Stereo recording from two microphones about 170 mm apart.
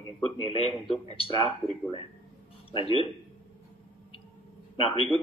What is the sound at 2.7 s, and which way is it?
Speech, 30° left (ahead or behind).